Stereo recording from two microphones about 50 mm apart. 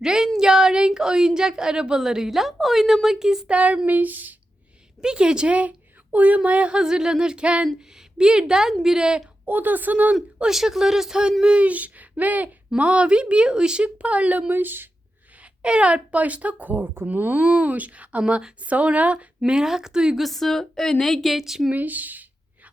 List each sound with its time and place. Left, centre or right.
0.0 s a woman's voice: centre
3.5 s a woman's voice: right
4.9 s a woman's voice: centre
9.5 s speech: right
10.5 s a woman's voice: centre; by 14.8 s right
15.6 s a woman's voice: right
19.5 s speech: centre
20.1 s a woman's voice: centre
21.3 s speech: centre
21.7 s speech: right